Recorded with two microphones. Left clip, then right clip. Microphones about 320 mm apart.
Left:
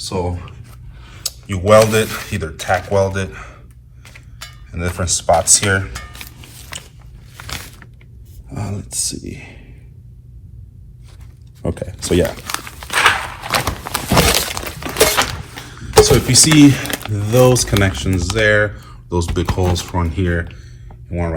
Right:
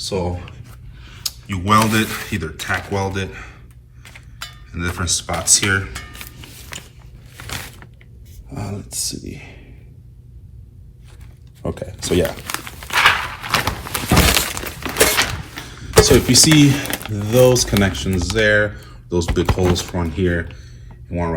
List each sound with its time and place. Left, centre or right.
0.0 s speech: centre
4.7 s speech: centre
8.5 s speech: left
11.6 s speech: left
12.5 s dog: centre
13.9 s a sound: centre
15.8 s speech: centre